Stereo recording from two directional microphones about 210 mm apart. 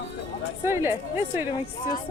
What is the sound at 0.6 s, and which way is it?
Speech, 10° right (ahead or behind).